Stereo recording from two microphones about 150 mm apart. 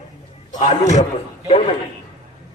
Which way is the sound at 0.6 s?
50° left (ahead or behind).